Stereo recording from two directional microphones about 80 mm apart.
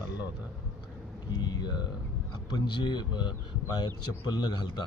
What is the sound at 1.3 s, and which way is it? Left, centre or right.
Speech, left.